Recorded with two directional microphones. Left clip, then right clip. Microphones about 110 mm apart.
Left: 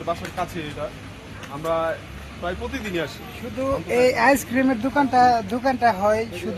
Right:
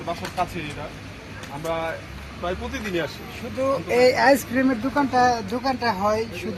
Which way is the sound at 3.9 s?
35° left (ahead or behind).